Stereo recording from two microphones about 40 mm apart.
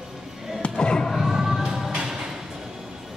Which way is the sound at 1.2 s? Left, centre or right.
Centre.